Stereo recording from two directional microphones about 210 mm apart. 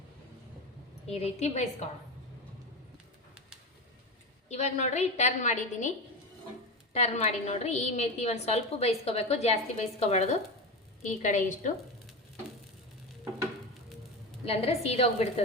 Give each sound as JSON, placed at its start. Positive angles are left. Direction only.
{"t": 1.0, "sound": "a woman's voice", "side_deg": 30}
{"t": 4.4, "sound": "a woman's voice", "side_deg": 30}
{"t": 6.9, "sound": "a woman's voice", "side_deg": 30}
{"t": 14.4, "sound": "a woman's voice", "side_deg": 30}